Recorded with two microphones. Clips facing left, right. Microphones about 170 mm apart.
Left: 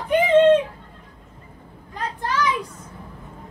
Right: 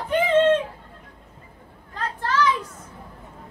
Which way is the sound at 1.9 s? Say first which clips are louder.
Right 1 dB; 15° left (ahead or behind).